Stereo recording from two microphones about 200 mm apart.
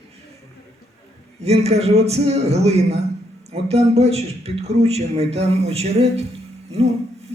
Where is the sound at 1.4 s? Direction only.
30° right (ahead or behind).